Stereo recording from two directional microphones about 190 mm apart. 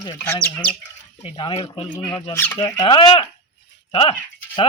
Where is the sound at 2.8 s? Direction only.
25° left (ahead or behind).